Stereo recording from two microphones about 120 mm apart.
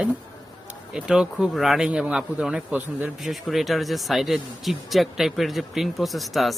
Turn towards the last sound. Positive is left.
turn(degrees=0)  # may be behind; listen again after turning